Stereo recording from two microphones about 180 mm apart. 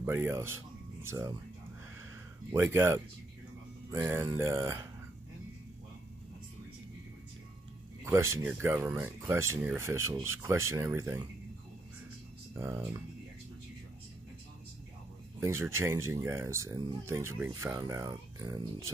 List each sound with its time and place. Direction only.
0.0 s speech: 10° right (ahead or behind)
2.5 s speech: 15° right (ahead or behind)
8.0 s speech: 15° right (ahead or behind)
12.5 s speech: 15° right (ahead or behind)
15.4 s speech: 15° right (ahead or behind)